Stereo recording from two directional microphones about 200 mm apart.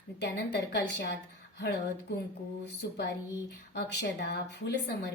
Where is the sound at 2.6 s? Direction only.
55° left (ahead or behind).